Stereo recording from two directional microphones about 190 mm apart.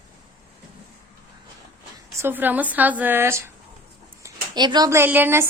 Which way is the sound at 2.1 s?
10° right (ahead or behind).